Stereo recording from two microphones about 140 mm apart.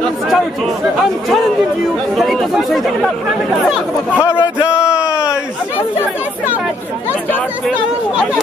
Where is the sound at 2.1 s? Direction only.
Centre (ahead or behind).